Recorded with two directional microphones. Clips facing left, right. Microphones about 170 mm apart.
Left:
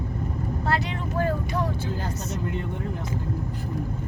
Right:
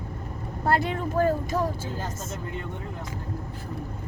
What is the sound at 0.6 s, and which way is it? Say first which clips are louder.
Speech: right 4 dB; 50° right (ahead or behind).